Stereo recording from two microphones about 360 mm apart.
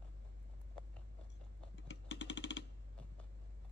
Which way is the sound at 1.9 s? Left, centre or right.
Left.